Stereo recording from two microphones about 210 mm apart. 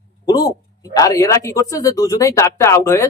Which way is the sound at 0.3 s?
20° left (ahead or behind).